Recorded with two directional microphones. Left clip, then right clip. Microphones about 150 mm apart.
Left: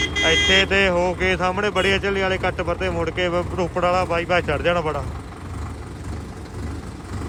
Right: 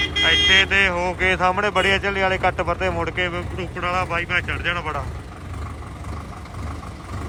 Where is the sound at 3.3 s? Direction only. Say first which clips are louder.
Left 6 dB; 30° left (ahead or behind).